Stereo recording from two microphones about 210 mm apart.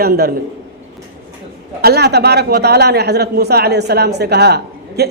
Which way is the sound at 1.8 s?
50° right (ahead or behind).